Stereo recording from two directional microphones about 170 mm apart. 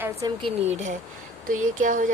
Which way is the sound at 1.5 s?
50° right (ahead or behind).